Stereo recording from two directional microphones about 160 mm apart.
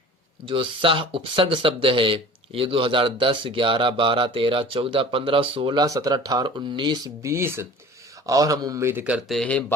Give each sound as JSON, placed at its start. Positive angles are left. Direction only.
{"t": 0.4, "sound": "a man's voice", "side_deg": -30}
{"t": 9.4, "sound": "speech", "side_deg": 10}